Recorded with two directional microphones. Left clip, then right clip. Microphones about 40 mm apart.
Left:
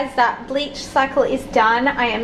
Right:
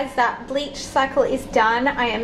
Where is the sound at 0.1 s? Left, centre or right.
Centre.